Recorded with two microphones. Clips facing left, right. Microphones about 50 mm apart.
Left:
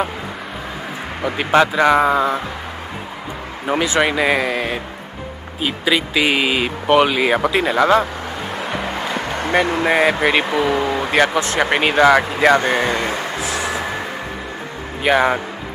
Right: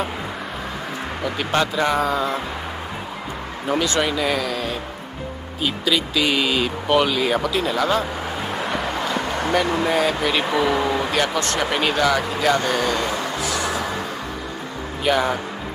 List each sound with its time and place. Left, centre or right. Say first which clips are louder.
1.2 s speech: left 7 dB; left
3.6 s speech: left 3 dB; centre
4.0 s speech: left 5 dB; left
8.5 s music: left 1 dB; centre
8.9 s a sound: left 1 dB; centre
10.4 s a sound: left 2 dB; centre
11.2 s speech: left 4 dB; centre
11.7 s speech: left 7 dB; left
13.4 s music: left 1 dB; centre
15.0 s speech: left 4 dB; left